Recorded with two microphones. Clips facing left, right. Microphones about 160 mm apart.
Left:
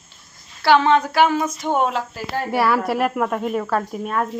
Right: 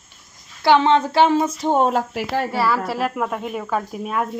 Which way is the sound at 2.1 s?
75° right (ahead or behind).